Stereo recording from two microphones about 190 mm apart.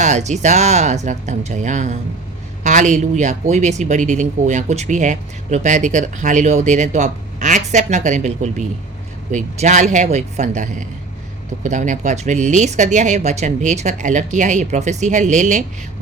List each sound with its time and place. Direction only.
0.0 s speech: 40° right (ahead or behind)